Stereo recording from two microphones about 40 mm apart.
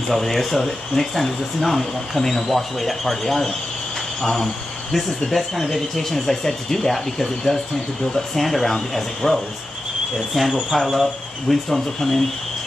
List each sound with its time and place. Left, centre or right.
0.1 s speech: centre